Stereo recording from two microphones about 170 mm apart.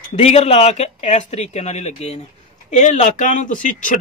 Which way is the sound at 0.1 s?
40° left (ahead or behind).